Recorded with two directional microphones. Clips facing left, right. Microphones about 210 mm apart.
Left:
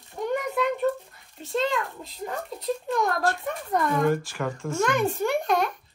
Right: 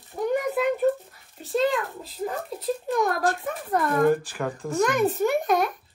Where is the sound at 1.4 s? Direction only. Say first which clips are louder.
Right 3 dB; centre (ahead or behind).